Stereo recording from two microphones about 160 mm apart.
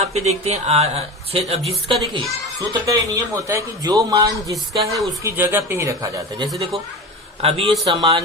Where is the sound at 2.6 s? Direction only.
20° right (ahead or behind).